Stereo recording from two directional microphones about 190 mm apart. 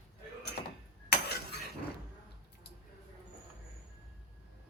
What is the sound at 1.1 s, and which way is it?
Cutlery, 55° left (ahead or behind).